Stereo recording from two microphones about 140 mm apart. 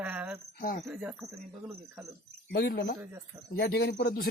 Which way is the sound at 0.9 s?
10° right (ahead or behind).